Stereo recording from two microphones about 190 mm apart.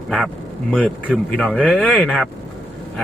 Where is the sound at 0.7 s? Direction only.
5° right (ahead or behind).